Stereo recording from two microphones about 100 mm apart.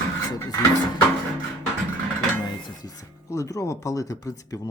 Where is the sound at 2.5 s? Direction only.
45° left (ahead or behind).